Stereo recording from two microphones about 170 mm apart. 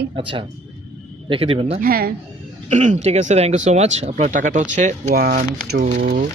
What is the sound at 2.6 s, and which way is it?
A woman's voice, 45° right (ahead or behind).